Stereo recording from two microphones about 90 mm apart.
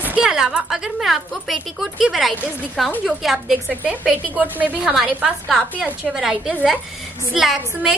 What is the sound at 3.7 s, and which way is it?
A woman's voice, 15° right (ahead or behind).